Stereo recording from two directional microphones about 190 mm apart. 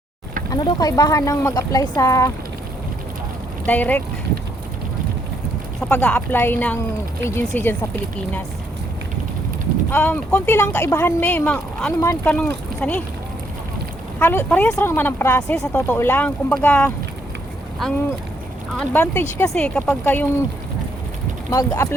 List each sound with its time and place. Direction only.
0.5 s speech: 20° left (ahead or behind)
3.7 s speech: 10° left (ahead or behind)
5.9 s speech: 10° left (ahead or behind)
9.9 s speech: 10° left (ahead or behind)
14.2 s speech: 10° left (ahead or behind)
18.8 s speech: 10° left (ahead or behind)
21.5 s speech: 20° left (ahead or behind)